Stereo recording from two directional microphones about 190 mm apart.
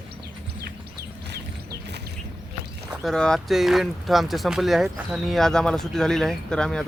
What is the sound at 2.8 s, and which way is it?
Speech, centre (ahead or behind).